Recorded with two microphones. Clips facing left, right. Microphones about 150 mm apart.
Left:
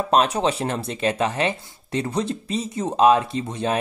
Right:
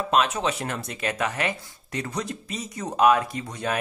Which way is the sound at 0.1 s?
35° left (ahead or behind).